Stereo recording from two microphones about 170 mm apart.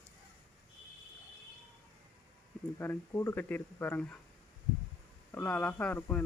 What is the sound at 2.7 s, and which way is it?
Speech, 15° left (ahead or behind).